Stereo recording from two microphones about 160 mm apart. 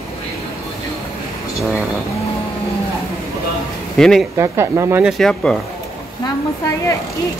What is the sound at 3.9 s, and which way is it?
Speech, centre (ahead or behind).